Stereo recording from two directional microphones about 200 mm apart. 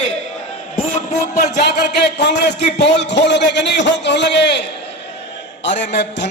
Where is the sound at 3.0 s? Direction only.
60° left (ahead or behind).